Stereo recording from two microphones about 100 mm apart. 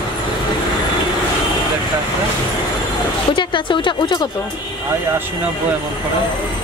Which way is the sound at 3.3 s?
55° left (ahead or behind).